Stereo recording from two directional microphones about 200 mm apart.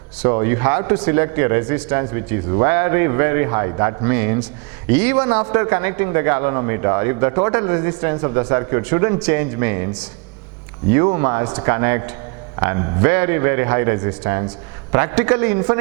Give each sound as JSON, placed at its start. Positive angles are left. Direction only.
{"t": 0.2, "sound": "a man's voice", "side_deg": -15}